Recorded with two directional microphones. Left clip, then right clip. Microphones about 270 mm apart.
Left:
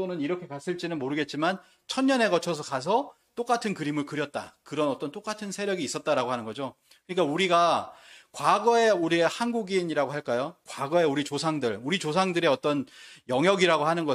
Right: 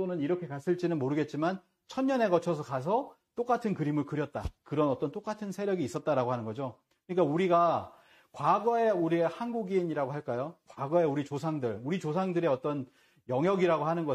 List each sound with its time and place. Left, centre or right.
0.0 s speech: centre
0.5 s speech: centre
1.9 s speech: left
9.7 s speech: left